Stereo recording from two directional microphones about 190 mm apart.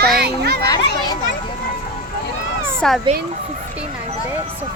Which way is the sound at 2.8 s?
5° left (ahead or behind).